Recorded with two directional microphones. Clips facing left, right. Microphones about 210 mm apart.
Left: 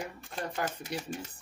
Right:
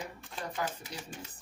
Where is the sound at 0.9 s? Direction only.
70° left (ahead or behind).